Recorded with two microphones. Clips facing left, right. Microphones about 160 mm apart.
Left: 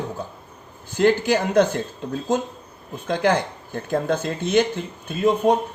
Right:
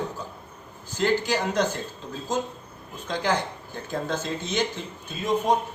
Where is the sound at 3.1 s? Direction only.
60° left (ahead or behind).